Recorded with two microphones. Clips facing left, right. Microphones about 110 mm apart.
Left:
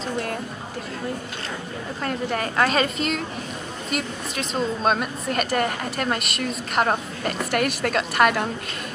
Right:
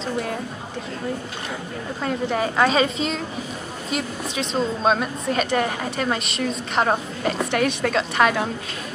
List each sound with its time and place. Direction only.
2.0 s speech: 5° right (ahead or behind)